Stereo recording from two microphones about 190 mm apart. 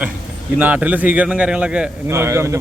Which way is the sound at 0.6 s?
10° right (ahead or behind).